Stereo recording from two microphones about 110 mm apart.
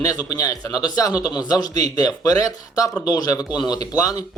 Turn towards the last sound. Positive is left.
turn(degrees=35)  # may be behind; listen again after turning